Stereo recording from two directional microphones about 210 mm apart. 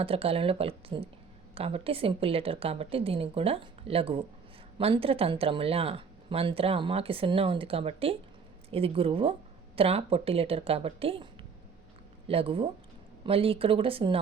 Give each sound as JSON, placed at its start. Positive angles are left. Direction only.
{"t": 0.0, "sound": "speech", "side_deg": -25}
{"t": 12.3, "sound": "speech", "side_deg": -25}